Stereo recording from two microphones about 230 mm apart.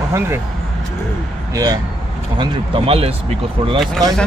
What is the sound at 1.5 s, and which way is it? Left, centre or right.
Speech, centre.